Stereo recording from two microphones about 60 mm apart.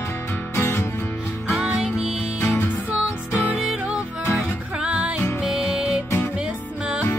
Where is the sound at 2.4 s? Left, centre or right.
Left.